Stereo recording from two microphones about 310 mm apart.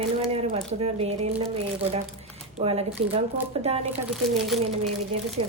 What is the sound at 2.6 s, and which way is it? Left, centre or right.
Speech, centre.